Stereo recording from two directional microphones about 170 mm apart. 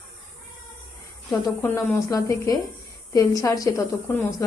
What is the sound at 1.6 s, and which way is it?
A woman's voice, 15° left (ahead or behind).